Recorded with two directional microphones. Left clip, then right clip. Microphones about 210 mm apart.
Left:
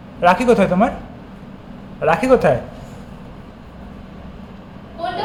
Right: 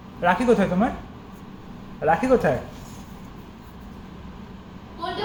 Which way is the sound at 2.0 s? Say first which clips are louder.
Left 5 dB; 20° left (ahead or behind).